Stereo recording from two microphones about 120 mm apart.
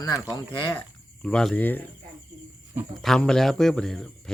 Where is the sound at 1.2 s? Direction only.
5° left (ahead or behind).